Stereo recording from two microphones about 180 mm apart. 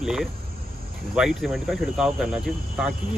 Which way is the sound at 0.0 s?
5° right (ahead or behind).